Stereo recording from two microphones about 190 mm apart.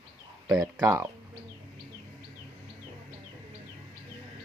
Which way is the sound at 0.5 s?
20° right (ahead or behind).